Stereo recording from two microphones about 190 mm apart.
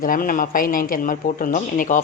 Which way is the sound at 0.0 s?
45° left (ahead or behind).